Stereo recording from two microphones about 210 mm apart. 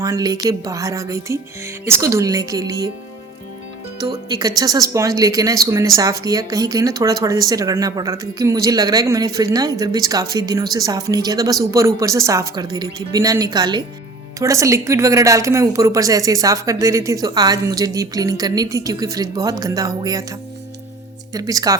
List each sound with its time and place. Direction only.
0.0 s a woman's voice: 15° right (ahead or behind)
4.0 s a woman's voice: 20° right (ahead or behind)
21.3 s a woman's voice: 15° right (ahead or behind)